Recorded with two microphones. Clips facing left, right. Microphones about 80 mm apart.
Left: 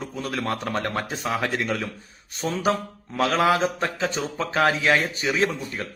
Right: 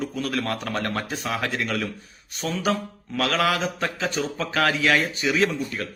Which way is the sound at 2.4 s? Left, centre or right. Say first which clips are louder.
Left 1 dB; left.